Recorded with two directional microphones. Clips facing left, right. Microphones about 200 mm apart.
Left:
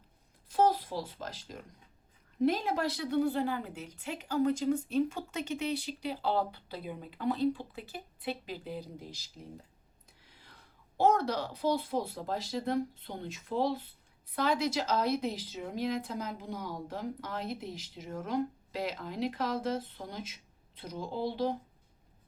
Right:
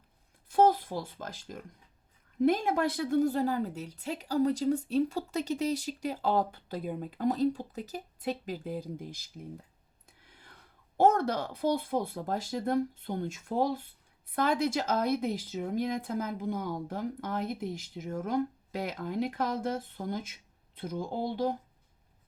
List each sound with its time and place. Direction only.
0.4 s a woman's voice: 50° right (ahead or behind)
10.2 s a sound: 50° right (ahead or behind)
10.9 s a woman's voice: 50° right (ahead or behind)